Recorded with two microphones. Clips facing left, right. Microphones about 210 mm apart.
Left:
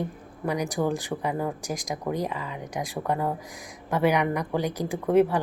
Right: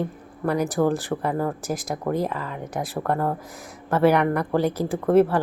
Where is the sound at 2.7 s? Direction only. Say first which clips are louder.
Right 3 dB; 55° right (ahead or behind).